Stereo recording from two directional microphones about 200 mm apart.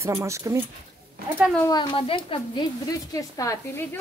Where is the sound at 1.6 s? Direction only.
20° left (ahead or behind).